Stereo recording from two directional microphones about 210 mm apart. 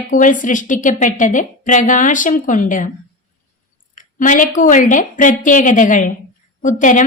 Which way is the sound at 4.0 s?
40° left (ahead or behind).